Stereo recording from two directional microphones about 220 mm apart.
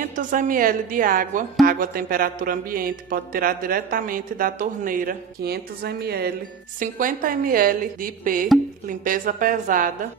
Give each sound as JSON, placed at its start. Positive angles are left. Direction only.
{"t": 0.0, "sound": "a woman's voice", "side_deg": -35}